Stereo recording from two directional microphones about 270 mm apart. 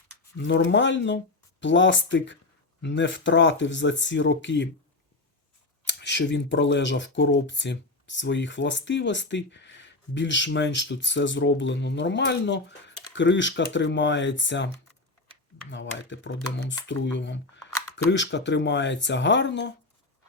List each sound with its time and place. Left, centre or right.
0.3 s speech: left
5.8 s speech: left